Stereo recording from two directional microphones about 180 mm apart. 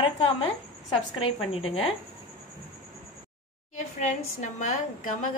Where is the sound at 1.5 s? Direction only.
30° left (ahead or behind).